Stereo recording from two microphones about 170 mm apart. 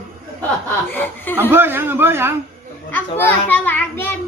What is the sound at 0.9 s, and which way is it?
Speech, 10° left (ahead or behind).